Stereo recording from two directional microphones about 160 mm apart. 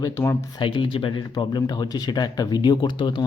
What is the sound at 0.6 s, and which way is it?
Speech, 30° left (ahead or behind).